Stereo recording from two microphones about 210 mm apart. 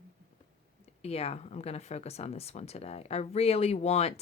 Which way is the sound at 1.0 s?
30° left (ahead or behind).